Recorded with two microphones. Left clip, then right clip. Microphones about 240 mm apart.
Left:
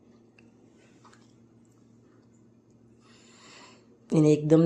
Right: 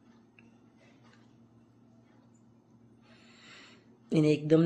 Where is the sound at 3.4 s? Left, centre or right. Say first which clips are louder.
Left 2 dB; centre.